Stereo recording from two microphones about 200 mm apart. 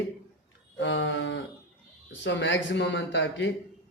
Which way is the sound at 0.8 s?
65° left (ahead or behind).